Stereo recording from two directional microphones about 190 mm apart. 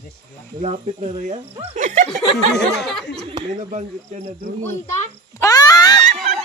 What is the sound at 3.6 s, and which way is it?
Speech, 40° right (ahead or behind).